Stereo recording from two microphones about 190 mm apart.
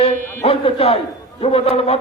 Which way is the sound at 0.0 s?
30° left (ahead or behind).